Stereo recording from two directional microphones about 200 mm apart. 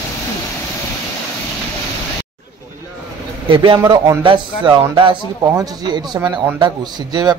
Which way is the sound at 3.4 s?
25° right (ahead or behind).